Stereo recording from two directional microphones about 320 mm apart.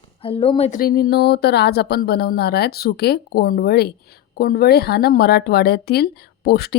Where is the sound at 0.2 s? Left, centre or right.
Centre.